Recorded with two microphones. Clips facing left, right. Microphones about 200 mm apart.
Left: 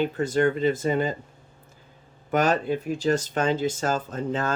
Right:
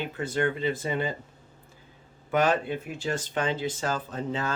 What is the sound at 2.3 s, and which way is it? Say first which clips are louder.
Speech: left 2 dB; 40° left (ahead or behind).